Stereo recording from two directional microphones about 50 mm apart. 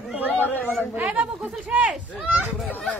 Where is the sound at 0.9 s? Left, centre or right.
Right.